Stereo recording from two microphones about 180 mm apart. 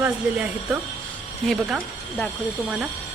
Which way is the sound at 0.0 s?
10° right (ahead or behind).